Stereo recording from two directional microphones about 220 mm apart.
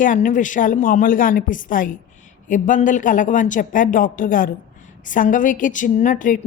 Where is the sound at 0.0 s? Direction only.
35° left (ahead or behind).